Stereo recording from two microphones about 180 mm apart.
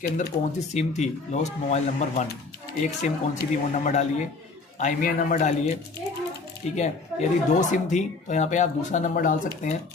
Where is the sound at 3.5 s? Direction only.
45° left (ahead or behind).